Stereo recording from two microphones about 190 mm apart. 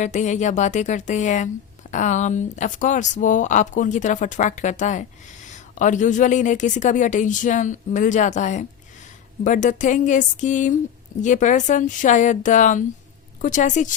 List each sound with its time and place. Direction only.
0.0 s speech: 40° left (ahead or behind)